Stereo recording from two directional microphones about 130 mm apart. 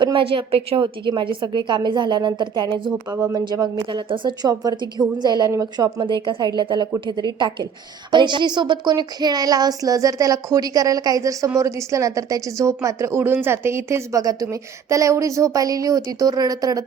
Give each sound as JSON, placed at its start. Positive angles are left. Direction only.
{"t": 0.0, "sound": "a woman's voice", "side_deg": -40}